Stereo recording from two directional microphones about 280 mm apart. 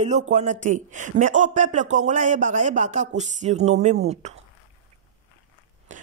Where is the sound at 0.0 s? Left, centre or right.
Right.